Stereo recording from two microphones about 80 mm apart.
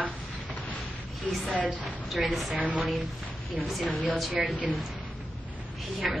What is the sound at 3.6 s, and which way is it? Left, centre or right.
Speech, centre.